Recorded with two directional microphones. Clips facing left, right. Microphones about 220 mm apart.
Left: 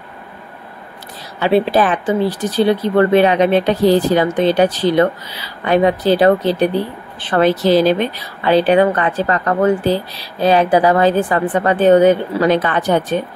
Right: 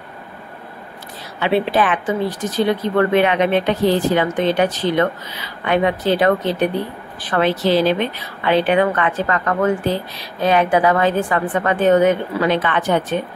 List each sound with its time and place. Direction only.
1.4 s speech: 40° left (ahead or behind)
7.4 s speech: 40° left (ahead or behind)